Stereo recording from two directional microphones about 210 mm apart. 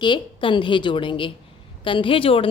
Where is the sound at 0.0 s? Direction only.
20° left (ahead or behind).